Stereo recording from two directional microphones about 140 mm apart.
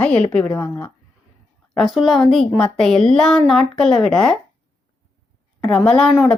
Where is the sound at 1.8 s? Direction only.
Centre (ahead or behind).